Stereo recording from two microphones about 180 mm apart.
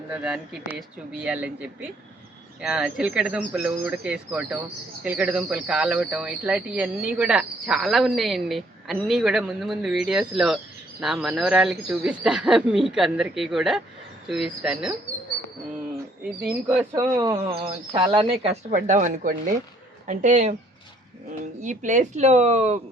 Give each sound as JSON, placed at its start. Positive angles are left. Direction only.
{"t": 0.1, "sound": "speech", "side_deg": -5}
{"t": 16.6, "sound": "speech", "side_deg": -15}
{"t": 18.7, "sound": "speech", "side_deg": -45}
{"t": 21.6, "sound": "speech", "side_deg": -45}